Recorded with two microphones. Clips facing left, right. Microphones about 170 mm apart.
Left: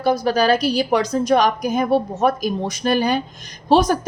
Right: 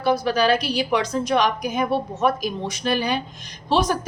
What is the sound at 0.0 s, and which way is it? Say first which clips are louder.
A woman's voice: left 2 dB; 40° left (ahead or behind).